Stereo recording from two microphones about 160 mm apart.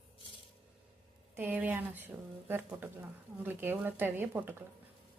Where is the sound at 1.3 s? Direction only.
10° right (ahead or behind).